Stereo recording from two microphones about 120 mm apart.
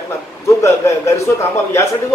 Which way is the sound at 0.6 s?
25° left (ahead or behind).